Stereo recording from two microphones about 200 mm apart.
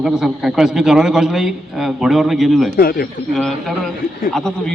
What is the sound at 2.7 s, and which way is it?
Speech, 50° left (ahead or behind).